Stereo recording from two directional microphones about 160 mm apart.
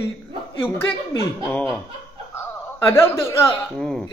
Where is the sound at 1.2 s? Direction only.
10° left (ahead or behind).